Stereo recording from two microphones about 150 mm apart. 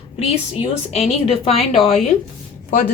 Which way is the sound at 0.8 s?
45° left (ahead or behind).